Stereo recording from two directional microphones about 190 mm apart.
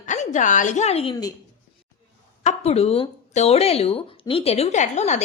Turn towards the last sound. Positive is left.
turn(degrees=35)  # may be behind; listen again after turning